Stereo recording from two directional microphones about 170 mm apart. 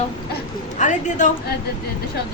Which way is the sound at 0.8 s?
45° left (ahead or behind).